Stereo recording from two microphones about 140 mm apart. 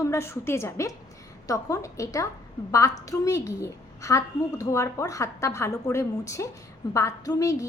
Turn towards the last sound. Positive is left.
turn(degrees=25)  # may be behind; listen again after turning